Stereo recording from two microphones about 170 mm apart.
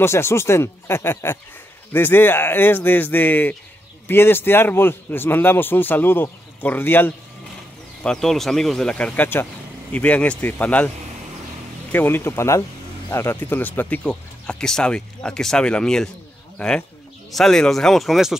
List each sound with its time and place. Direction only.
0.0 s a man's voice: 15° left (ahead or behind)
11.9 s a man's voice: 10° left (ahead or behind)